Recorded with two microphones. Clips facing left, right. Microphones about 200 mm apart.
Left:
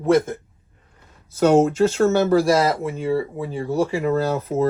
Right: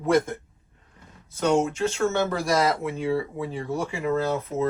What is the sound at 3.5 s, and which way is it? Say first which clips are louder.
Speech: left 10 dB; 30° left (ahead or behind).